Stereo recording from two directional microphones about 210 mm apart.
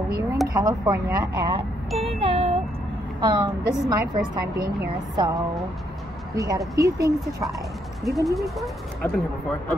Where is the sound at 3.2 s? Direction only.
20° right (ahead or behind).